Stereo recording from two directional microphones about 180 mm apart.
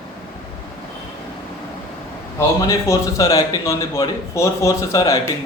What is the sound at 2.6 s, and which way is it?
A man's voice, 15° left (ahead or behind).